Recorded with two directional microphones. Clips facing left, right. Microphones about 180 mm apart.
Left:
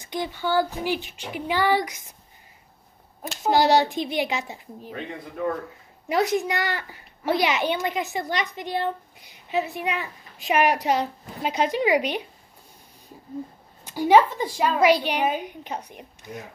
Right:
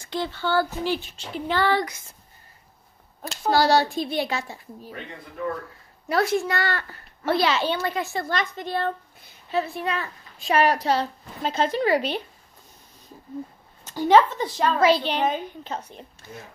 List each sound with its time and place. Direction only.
0.0 s a child's voice: 15° left (ahead or behind)
3.4 s a child's voice: 20° left (ahead or behind)
6.0 s a child's voice: 15° left (ahead or behind)
13.8 s a child's voice: 10° left (ahead or behind)